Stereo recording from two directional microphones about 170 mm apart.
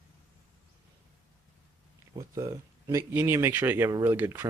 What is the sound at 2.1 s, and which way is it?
Speech, 20° right (ahead or behind).